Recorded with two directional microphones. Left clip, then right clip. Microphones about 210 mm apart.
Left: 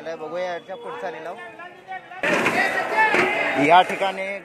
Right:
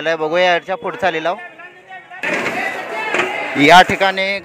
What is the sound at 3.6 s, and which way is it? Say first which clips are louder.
Speech: right 9 dB; 25° right (ahead or behind).